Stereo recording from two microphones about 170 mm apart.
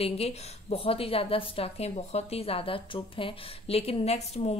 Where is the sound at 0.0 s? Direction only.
40° left (ahead or behind).